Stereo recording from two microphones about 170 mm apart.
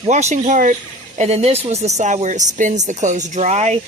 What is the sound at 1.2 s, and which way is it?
Speech, 35° right (ahead or behind).